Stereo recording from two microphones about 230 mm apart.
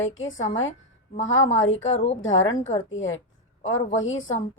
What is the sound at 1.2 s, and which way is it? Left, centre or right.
Speech, left.